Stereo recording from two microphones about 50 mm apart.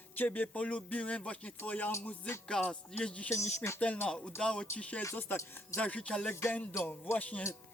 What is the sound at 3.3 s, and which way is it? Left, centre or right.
Speech, left.